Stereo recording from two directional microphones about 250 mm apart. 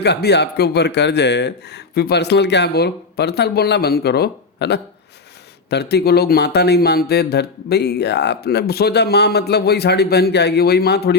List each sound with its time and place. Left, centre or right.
0.0 s speech: left